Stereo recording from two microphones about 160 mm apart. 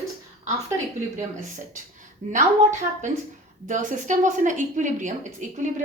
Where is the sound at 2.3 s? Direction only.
50° right (ahead or behind).